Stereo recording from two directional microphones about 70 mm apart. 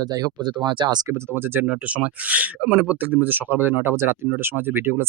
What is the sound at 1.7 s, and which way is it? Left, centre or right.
Speech, centre.